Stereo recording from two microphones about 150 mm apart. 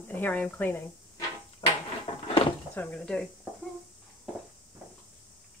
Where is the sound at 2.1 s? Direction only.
35° left (ahead or behind).